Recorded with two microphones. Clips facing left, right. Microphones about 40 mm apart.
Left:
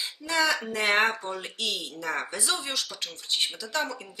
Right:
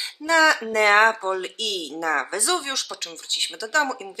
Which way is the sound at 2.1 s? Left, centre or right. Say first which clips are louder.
Right 6 dB; right.